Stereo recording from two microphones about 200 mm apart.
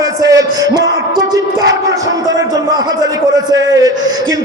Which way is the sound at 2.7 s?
20° right (ahead or behind).